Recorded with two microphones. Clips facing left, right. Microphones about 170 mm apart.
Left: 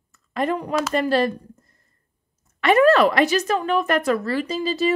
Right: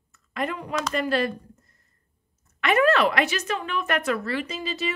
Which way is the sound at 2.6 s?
35° left (ahead or behind).